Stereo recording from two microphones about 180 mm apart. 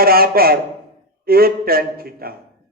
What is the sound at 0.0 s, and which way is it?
A man's voice, 55° right (ahead or behind).